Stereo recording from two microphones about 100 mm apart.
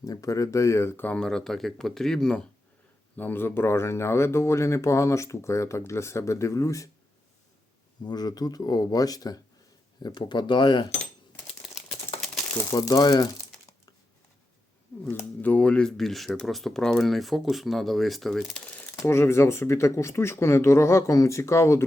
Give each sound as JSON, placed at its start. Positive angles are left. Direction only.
{"t": 0.0, "sound": "speech", "side_deg": 35}
{"t": 3.2, "sound": "speech", "side_deg": 20}
{"t": 8.0, "sound": "speech", "side_deg": 45}
{"t": 11.4, "sound": "a sound", "side_deg": 0}
{"t": 12.7, "sound": "speech", "side_deg": 45}
{"t": 15.1, "sound": "speech", "side_deg": 15}
{"t": 18.8, "sound": "speech", "side_deg": 25}